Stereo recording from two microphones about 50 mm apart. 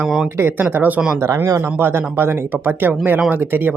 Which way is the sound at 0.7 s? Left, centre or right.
Right.